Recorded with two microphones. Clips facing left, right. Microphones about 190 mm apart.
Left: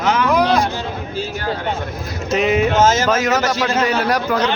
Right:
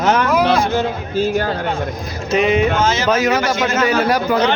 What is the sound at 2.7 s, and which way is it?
Speech, 45° left (ahead or behind).